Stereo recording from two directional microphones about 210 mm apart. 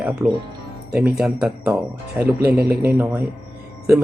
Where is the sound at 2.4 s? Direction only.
45° right (ahead or behind).